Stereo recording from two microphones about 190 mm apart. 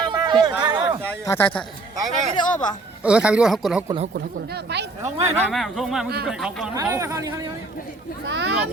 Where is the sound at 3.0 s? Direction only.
5° right (ahead or behind).